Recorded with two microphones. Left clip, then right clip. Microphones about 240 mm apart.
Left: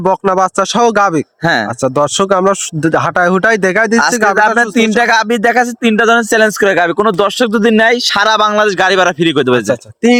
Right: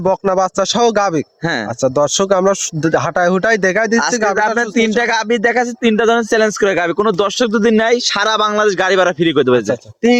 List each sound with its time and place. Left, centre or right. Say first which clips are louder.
0.0 s speech: left 3 dB; left
4.4 s a man's voice: left 4 dB; left
10.0 s speech: left 2 dB; left